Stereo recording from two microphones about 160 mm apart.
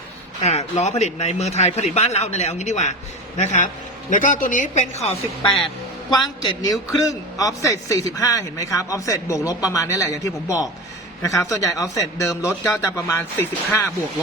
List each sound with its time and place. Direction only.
0.4 s a man's voice: 45° left (ahead or behind)
6.1 s a man's voice: 25° left (ahead or behind)